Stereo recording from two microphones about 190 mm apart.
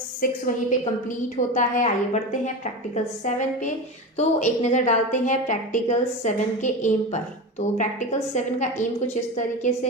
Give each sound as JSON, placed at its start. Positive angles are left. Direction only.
{"t": 0.2, "sound": "a woman's voice", "side_deg": 45}